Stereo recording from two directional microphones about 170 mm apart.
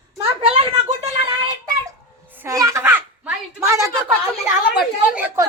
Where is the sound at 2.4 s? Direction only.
20° right (ahead or behind).